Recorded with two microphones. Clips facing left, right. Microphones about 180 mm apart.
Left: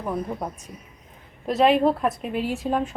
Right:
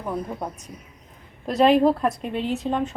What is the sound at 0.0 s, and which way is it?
Speech, centre (ahead or behind).